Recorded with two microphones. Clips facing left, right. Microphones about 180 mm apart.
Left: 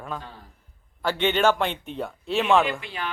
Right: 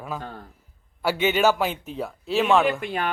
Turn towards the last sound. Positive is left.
turn(degrees=-50)  # may be behind; listen again after turning